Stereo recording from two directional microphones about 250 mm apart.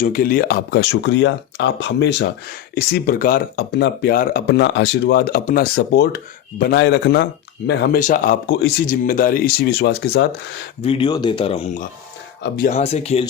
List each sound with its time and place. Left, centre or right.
0.0 s speech: left
10.8 s speech: centre